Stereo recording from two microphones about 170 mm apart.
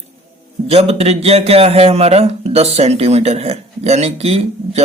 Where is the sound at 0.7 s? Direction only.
35° right (ahead or behind).